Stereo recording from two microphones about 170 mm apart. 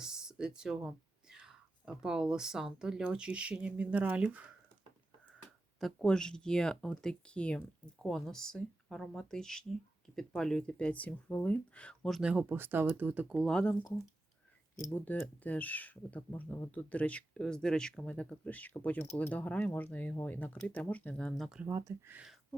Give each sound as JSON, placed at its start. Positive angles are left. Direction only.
{"t": 0.0, "sound": "speech", "side_deg": -5}
{"t": 5.8, "sound": "speech", "side_deg": 5}
{"t": 14.8, "sound": "speech", "side_deg": 10}
{"t": 21.7, "sound": "speech", "side_deg": -15}